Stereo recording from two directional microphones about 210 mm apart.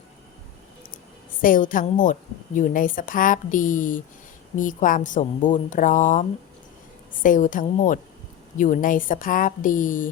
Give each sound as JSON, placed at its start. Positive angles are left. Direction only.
{"t": 1.3, "sound": "a woman's voice", "side_deg": 40}